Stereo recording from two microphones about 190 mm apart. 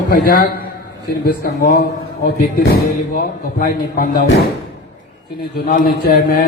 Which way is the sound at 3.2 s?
45° left (ahead or behind).